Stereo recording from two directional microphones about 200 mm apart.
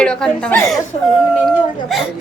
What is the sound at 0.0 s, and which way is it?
Speech, 5° left (ahead or behind).